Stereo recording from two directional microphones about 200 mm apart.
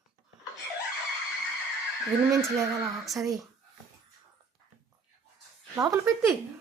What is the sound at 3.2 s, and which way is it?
Speech, 15° right (ahead or behind).